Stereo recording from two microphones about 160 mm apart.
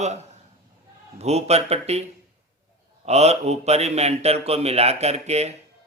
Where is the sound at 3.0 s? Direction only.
40° right (ahead or behind).